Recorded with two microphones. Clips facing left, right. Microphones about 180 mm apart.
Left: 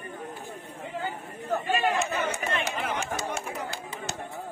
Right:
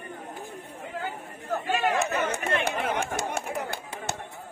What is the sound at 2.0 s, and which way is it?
Chatter, 60° right (ahead or behind).